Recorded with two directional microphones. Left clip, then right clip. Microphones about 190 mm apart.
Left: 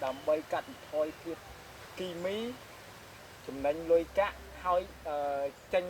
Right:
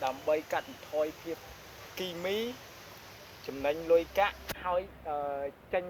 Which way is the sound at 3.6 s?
15° right (ahead or behind).